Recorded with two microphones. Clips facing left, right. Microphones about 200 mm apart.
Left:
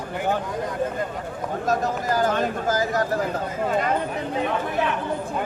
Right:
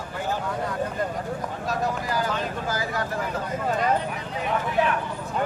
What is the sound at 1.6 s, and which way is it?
Speech, 45° left (ahead or behind).